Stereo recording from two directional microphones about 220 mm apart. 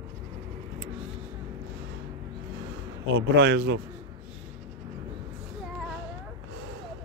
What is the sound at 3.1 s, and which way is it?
Speech, 60° right (ahead or behind).